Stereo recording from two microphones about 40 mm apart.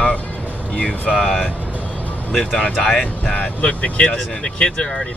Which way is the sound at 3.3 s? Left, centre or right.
Left.